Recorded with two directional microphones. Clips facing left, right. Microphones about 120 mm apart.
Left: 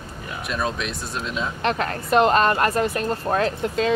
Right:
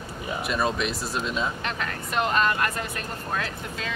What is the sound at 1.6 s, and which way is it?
Speech, 40° left (ahead or behind).